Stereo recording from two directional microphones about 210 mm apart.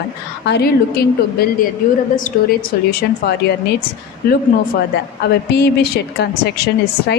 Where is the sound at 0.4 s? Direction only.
50° left (ahead or behind).